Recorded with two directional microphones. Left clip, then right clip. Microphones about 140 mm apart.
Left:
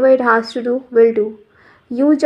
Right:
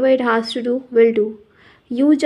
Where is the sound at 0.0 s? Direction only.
20° right (ahead or behind).